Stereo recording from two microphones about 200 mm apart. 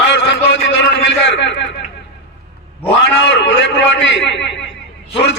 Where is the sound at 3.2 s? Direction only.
65° left (ahead or behind).